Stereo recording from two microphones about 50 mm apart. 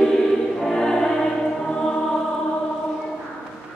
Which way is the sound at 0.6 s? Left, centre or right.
Centre.